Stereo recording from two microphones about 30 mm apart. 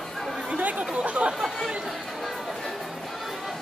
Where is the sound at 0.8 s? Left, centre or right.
Right.